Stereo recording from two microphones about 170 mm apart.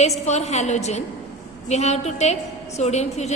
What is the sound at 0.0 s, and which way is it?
A woman's voice, 40° left (ahead or behind).